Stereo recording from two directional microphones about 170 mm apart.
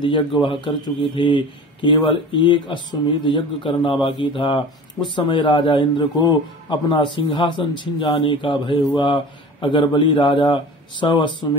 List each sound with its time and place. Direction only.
0.0 s a man's voice: 30° left (ahead or behind)